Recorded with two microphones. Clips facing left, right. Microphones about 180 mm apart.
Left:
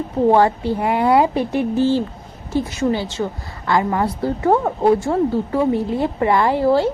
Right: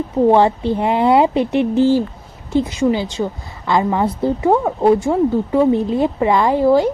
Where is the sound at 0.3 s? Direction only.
20° right (ahead or behind).